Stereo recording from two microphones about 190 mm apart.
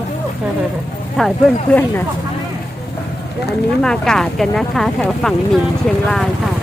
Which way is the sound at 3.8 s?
5° left (ahead or behind).